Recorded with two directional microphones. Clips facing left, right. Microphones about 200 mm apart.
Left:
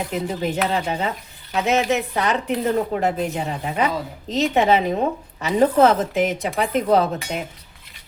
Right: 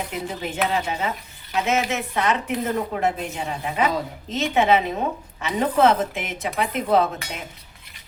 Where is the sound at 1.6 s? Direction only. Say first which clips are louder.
Left 5 dB; 35° left (ahead or behind).